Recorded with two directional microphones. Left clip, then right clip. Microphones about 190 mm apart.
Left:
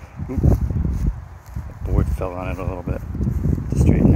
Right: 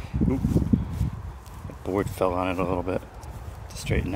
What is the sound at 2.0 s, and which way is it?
Speech, 35° right (ahead or behind).